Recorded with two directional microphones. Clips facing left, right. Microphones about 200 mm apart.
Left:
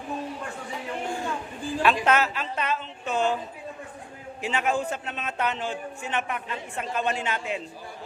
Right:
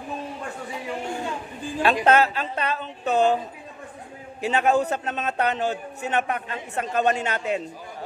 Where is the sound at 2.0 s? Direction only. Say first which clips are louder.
Right 4 dB; 30° right (ahead or behind).